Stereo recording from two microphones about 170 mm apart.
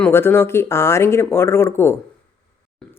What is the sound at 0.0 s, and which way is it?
A woman's voice, 15° left (ahead or behind).